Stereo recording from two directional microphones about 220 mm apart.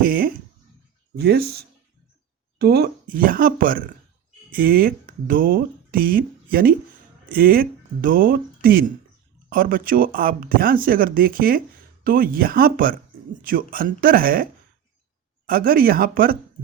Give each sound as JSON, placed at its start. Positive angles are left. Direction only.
{"t": 0.0, "sound": "a sound", "side_deg": -40}
{"t": 1.1, "sound": "speech", "side_deg": -45}
{"t": 15.4, "sound": "speech", "side_deg": -40}